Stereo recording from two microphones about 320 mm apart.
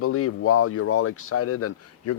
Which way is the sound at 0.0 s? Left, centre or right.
Left.